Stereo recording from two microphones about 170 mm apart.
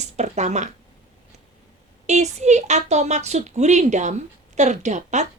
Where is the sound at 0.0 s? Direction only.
40° right (ahead or behind).